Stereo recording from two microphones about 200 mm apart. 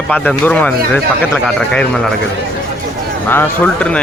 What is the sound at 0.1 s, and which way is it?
Speech, 5° left (ahead or behind).